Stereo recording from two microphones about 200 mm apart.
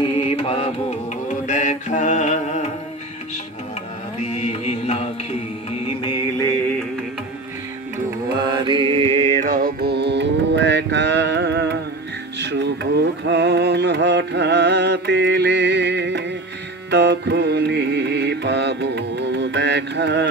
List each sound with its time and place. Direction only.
0.0 s mantra: 30° left (ahead or behind)
1.3 s mantra: 40° left (ahead or behind)
4.3 s music: 35° left (ahead or behind)
8.5 s music: 25° right (ahead or behind); by 20.2 s 60° right (ahead or behind)